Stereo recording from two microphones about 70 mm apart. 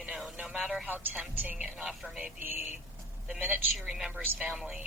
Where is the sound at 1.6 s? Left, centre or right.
Centre.